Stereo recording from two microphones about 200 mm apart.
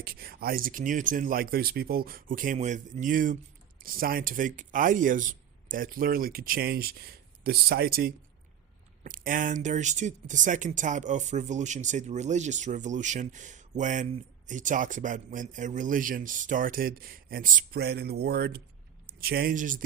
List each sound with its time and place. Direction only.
0.0 s speech: 50° right (ahead or behind)